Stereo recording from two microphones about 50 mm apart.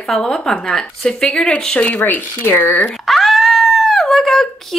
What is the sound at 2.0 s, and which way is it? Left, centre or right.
Speech, left.